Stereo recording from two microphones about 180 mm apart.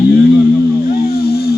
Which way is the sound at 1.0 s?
60° left (ahead or behind).